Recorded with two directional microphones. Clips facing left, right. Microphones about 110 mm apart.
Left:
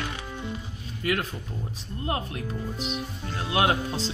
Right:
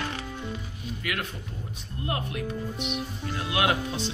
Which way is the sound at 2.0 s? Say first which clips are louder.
Left 1 dB; 30° left (ahead or behind).